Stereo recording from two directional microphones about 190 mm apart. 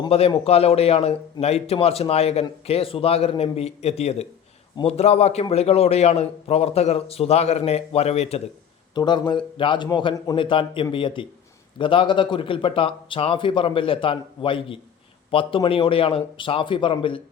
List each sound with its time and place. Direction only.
0.0 s a man's voice: 30° left (ahead or behind)
9.0 s speech: 20° left (ahead or behind)